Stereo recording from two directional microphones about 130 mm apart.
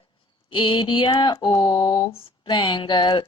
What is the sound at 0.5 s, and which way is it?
Speech, 40° left (ahead or behind).